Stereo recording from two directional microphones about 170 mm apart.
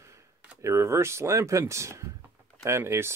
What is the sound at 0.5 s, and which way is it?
Speech, 15° right (ahead or behind).